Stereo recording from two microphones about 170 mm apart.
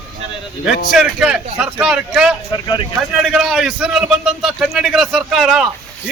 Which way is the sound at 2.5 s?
25° left (ahead or behind).